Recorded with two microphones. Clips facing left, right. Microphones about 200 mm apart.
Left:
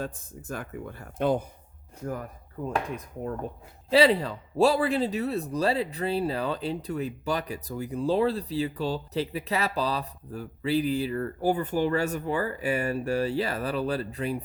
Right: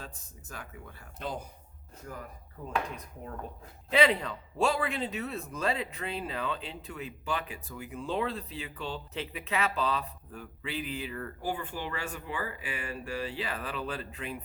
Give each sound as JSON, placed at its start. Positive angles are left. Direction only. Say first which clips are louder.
{"t": 0.0, "sound": "speech", "louder": "left 12 dB", "side_deg": 50}
{"t": 3.8, "sound": "speech", "louder": "left 5 dB", "side_deg": 35}